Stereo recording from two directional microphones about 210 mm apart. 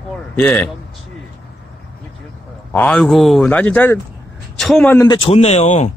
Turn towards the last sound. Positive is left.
turn(degrees=35)  # may be behind; listen again after turning